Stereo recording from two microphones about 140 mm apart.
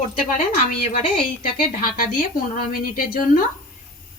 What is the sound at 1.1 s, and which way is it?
Speech, 40° left (ahead or behind).